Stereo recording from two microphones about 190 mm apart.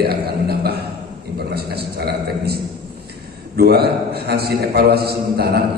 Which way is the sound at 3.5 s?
55° right (ahead or behind).